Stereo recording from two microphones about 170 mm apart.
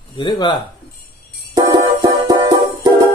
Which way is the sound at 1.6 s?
20° right (ahead or behind).